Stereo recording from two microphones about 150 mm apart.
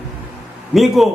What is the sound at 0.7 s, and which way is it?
Speech, centre (ahead or behind).